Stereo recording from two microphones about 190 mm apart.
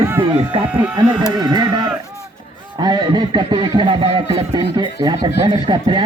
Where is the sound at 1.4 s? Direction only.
20° right (ahead or behind).